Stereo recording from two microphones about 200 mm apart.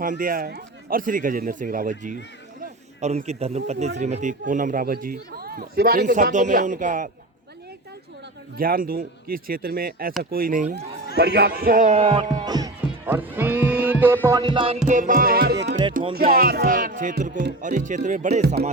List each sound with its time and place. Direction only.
0.0 s a man's voice: 45° right (ahead or behind)
8.5 s speech: 45° right (ahead or behind)
11.2 s a man's voice: 55° right (ahead or behind); by 12.5 s 30° right (ahead or behind)
12.5 s music: 20° right (ahead or behind)
14.3 s music: 20° right (ahead or behind)
14.8 s a man's voice: 40° right (ahead or behind)